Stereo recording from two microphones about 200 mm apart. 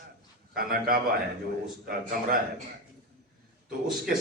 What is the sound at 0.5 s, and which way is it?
Speech, 45° right (ahead or behind).